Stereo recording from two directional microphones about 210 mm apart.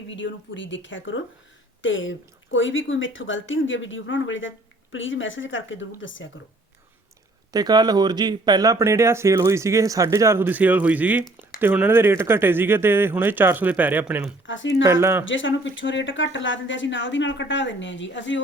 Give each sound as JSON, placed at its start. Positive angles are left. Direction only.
{"t": 0.1, "sound": "speech", "side_deg": 60}
{"t": 7.5, "sound": "speech", "side_deg": -20}
{"t": 14.4, "sound": "speech", "side_deg": 60}